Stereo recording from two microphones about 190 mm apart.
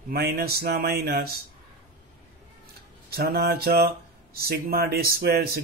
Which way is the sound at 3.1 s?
55° right (ahead or behind).